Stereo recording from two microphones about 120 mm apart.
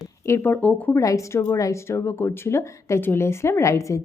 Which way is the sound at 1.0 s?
25° left (ahead or behind).